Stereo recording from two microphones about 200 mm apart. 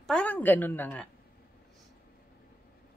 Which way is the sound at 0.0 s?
5° left (ahead or behind).